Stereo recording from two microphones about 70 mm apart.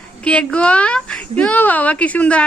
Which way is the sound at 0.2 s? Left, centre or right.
Centre.